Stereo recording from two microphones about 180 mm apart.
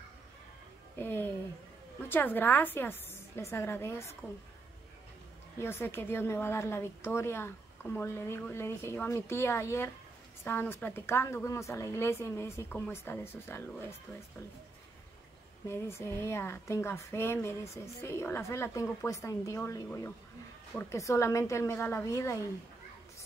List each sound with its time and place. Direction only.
0.9 s a woman's voice: 10° left (ahead or behind)
5.6 s a woman's voice: 15° left (ahead or behind)
15.6 s a woman's voice: 15° left (ahead or behind)